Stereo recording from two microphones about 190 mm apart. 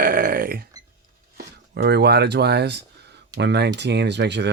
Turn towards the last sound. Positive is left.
turn(degrees=-65)  # may be behind; listen again after turning